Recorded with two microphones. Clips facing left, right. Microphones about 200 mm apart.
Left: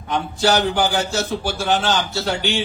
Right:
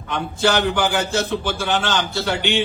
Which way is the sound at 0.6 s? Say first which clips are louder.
Even; 55° right (ahead or behind).